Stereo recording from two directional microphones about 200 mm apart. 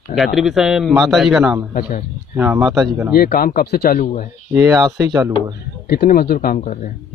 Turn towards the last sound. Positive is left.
turn(degrees=40)  # may be behind; listen again after turning